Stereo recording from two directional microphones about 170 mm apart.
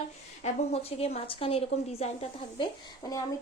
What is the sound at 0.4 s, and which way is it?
A woman's voice, 35° left (ahead or behind).